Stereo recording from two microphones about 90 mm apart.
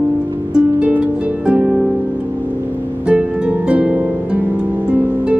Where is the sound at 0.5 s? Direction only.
15° right (ahead or behind).